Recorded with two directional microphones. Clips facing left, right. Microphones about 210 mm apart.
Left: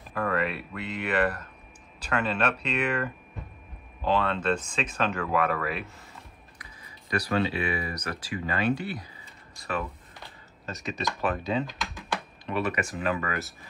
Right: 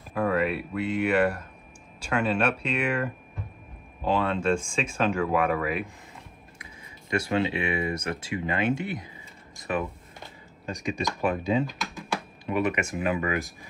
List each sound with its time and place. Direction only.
0.1 s speech: 10° right (ahead or behind)
6.6 s speech: 25° right (ahead or behind)